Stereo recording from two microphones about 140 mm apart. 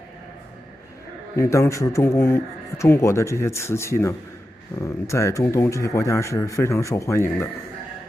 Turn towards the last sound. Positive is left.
turn(degrees=20)  # may be behind; listen again after turning